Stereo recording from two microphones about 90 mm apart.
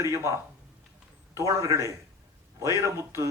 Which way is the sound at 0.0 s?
35° right (ahead or behind).